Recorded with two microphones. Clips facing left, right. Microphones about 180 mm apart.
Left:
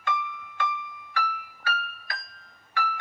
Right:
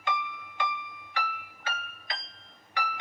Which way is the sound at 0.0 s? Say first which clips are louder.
Left 2 dB; 15° right (ahead or behind).